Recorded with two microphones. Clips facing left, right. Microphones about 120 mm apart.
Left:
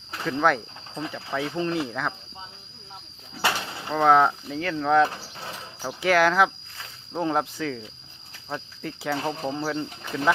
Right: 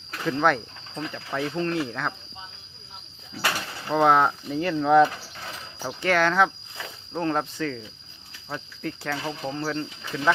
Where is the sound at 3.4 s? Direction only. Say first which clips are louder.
Left 2 dB; 20° left (ahead or behind).